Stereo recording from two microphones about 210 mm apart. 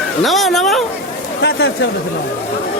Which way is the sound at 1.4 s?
55° left (ahead or behind).